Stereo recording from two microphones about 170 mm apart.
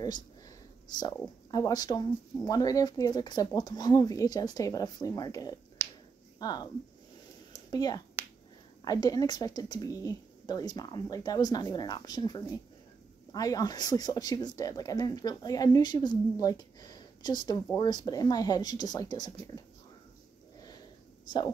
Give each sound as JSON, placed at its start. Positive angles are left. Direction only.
{"t": 1.5, "sound": "speech", "side_deg": 20}
{"t": 5.8, "sound": "finger snapping", "side_deg": -15}
{"t": 6.4, "sound": "speech", "side_deg": 25}
{"t": 7.5, "sound": "a sound", "side_deg": 20}
{"t": 8.8, "sound": "speech", "side_deg": 20}
{"t": 21.3, "sound": "speech", "side_deg": 25}